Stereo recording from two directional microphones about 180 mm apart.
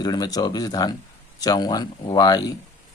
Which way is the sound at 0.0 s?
20° left (ahead or behind).